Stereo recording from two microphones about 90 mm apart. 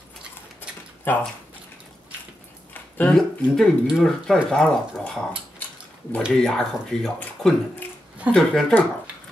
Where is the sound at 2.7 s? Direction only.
20° left (ahead or behind).